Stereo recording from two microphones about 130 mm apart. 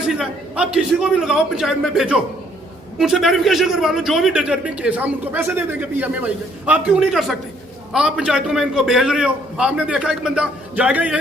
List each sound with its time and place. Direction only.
0.0 s a man's voice: 5° right (ahead or behind)